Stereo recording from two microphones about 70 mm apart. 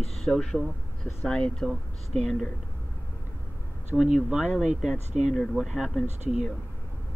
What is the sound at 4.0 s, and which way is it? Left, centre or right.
Speech, centre.